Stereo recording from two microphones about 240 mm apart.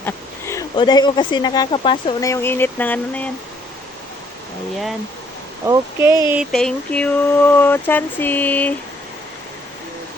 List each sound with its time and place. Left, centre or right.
0.0 s speech: centre
5.6 s speech: centre
6.3 s speech: centre